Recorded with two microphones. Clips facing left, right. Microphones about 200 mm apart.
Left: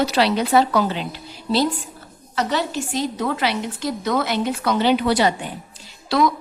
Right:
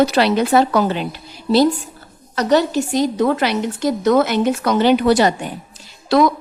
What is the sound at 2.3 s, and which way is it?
A woman's voice, 40° right (ahead or behind).